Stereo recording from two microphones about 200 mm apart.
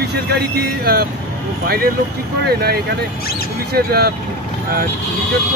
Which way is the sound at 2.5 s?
50° right (ahead or behind).